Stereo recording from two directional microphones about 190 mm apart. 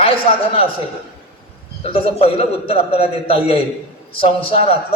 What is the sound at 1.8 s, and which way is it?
A man's voice, 30° left (ahead or behind).